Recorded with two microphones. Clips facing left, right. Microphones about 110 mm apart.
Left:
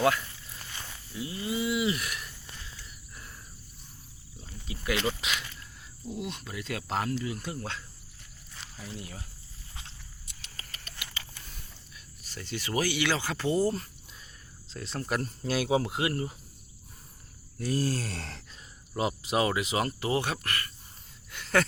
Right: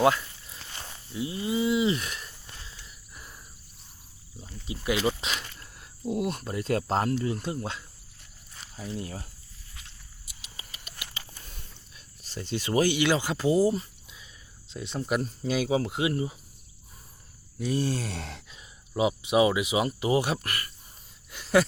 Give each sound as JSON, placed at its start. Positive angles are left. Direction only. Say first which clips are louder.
{"t": 0.0, "sound": "livestock", "louder": "right 3 dB", "side_deg": -20}
{"t": 2.7, "sound": "a sound", "louder": "even", "side_deg": -15}
{"t": 4.6, "sound": "speech", "louder": "right 3 dB", "side_deg": -20}
{"t": 5.2, "sound": "a sound", "louder": "right 1 dB", "side_deg": -40}
{"t": 6.1, "sound": "speech", "louder": "right 8 dB", "side_deg": -50}
{"t": 8.7, "sound": "speech", "louder": "right 7 dB", "side_deg": -30}
{"t": 10.6, "sound": "patter", "louder": "even", "side_deg": -15}
{"t": 12.2, "sound": "speech", "louder": "right 5 dB", "side_deg": -20}
{"t": 13.6, "sound": "speech", "louder": "right 4 dB", "side_deg": -5}
{"t": 17.6, "sound": "speech", "louder": "right 2 dB", "side_deg": 0}
{"t": 21.3, "sound": "a sound", "louder": "right 4 dB", "side_deg": -15}